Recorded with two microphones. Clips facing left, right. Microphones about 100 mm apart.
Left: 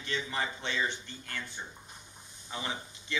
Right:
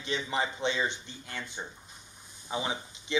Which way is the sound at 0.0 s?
20° right (ahead or behind).